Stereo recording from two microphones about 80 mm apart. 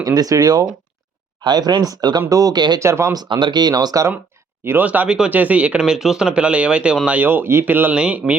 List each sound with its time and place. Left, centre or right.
0.0 s speech: right
2.8 s speech: right
3.2 s speech: right
4.6 s speech: right
4.9 s speech: centre